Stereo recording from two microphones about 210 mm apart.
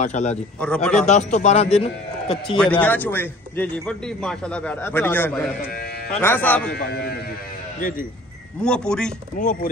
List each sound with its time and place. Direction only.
0.0 s speech: 35° left (ahead or behind)
0.6 s speech: 5° left (ahead or behind)
1.0 s speech: 35° left (ahead or behind)
2.6 s a man's voice: 5° left (ahead or behind)
6.7 s speech: 50° left (ahead or behind)
8.5 s speech: 5° left (ahead or behind)
9.4 s speech: 40° left (ahead or behind)